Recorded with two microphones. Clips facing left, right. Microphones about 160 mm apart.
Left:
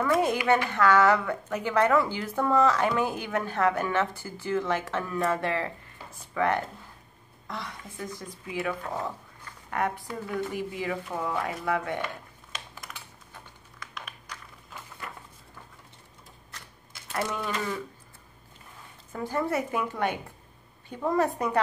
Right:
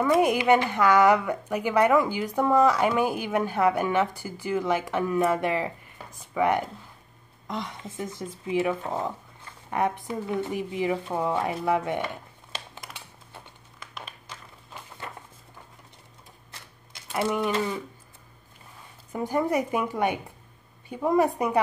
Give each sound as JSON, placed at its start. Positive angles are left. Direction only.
{"t": 0.0, "sound": "a woman's voice", "side_deg": -15}
{"t": 12.5, "sound": "typing", "side_deg": -25}
{"t": 14.0, "sound": "a sound", "side_deg": -25}
{"t": 17.5, "sound": "speech", "side_deg": -20}
{"t": 19.1, "sound": "a woman's voice", "side_deg": -15}